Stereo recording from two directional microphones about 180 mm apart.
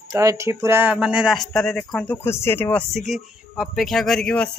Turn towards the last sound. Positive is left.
turn(degrees=5)  # may be behind; listen again after turning